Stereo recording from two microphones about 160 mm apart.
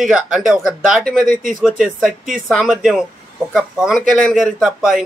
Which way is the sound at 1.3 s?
60° right (ahead or behind).